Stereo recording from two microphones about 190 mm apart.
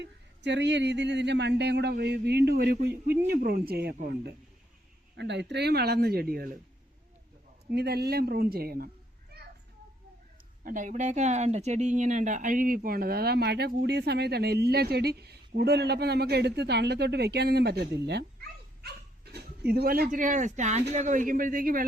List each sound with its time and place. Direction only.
0.0 s speech: 65° right (ahead or behind)
7.7 s speech: 60° right (ahead or behind)
10.6 s a man's voice: 45° right (ahead or behind)